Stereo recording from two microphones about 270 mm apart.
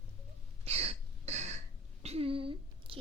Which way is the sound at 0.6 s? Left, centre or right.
Right.